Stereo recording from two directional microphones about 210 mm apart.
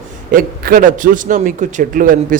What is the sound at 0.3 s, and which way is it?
A man's voice, 40° right (ahead or behind).